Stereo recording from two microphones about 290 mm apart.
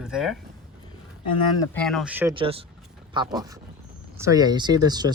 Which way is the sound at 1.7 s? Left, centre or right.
Centre.